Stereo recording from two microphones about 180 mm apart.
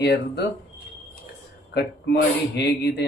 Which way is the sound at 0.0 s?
65° left (ahead or behind).